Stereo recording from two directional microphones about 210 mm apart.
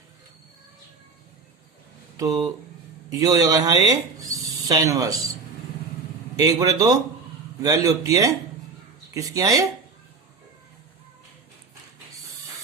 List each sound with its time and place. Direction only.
2.1 s speech: 15° right (ahead or behind)
6.3 s speech: 15° right (ahead or behind)